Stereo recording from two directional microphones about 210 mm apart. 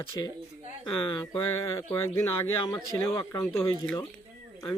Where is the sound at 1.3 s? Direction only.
15° left (ahead or behind).